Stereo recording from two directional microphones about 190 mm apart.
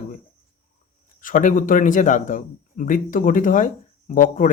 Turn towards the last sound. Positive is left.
turn(degrees=45)  # may be behind; listen again after turning